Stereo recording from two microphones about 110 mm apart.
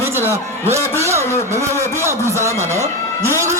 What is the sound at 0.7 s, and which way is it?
Speech, 25° right (ahead or behind).